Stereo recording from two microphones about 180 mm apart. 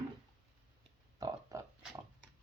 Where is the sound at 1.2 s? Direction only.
20° right (ahead or behind).